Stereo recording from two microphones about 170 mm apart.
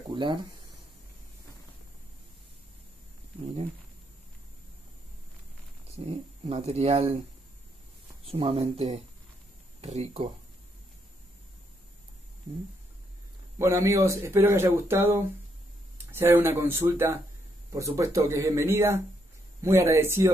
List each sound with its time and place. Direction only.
0.1 s a sound: 30° right (ahead or behind)
3.3 s speech: 35° right (ahead or behind)
5.9 s speech: 35° right (ahead or behind)
8.3 s speech: 35° right (ahead or behind)
13.6 s speech: 15° right (ahead or behind)